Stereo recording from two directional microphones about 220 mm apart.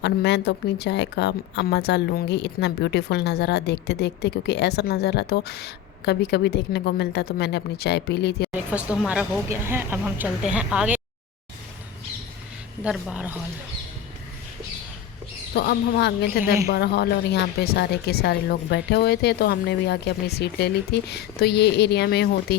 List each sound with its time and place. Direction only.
0.0 s speech: 50° left (ahead or behind)
8.7 s a woman's voice: 5° right (ahead or behind)
12.8 s a woman's voice: 5° right (ahead or behind)
15.5 s speech: 50° left (ahead or behind)
16.4 s a woman's voice: 10° right (ahead or behind)
16.7 s speech: 45° left (ahead or behind)